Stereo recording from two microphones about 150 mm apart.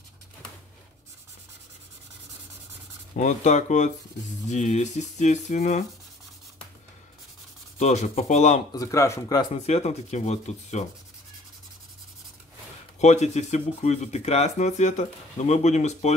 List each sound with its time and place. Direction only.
3.2 s speech: 55° left (ahead or behind)
7.8 s speech: 50° left (ahead or behind)
8.7 s speech: 20° left (ahead or behind)
9.7 s speech: 50° left (ahead or behind)
13.0 s speech: 50° left (ahead or behind)